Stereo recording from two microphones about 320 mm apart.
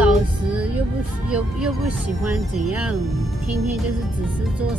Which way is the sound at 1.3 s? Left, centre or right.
Centre.